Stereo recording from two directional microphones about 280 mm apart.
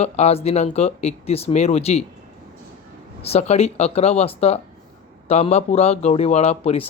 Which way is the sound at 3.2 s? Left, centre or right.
Left.